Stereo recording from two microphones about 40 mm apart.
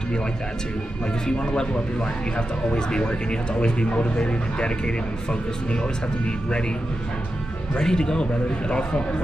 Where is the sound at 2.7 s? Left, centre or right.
Left.